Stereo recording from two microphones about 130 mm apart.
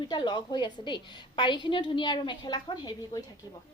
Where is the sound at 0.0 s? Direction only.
35° left (ahead or behind).